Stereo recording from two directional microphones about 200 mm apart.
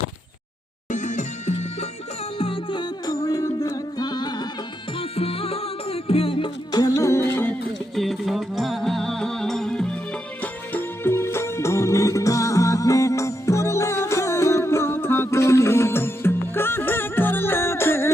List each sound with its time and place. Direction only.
0.9 s music: 40° left (ahead or behind); by 7.5 s 15° left (ahead or behind)
7.9 s music: centre (ahead or behind)